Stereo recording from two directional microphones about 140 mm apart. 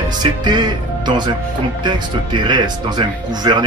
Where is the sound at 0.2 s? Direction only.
30° right (ahead or behind).